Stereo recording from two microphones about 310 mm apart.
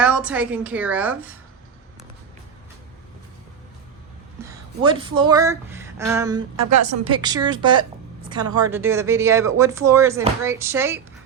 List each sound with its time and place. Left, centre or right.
0.0 s a woman's voice: centre
4.8 s speech: centre
6.6 s a woman's voice: right
7.0 s speech: centre